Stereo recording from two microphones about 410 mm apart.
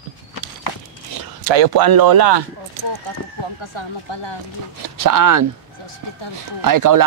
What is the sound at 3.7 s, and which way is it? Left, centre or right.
Speech, left.